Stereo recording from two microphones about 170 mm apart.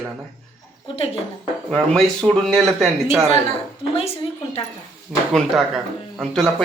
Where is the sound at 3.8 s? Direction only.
30° left (ahead or behind).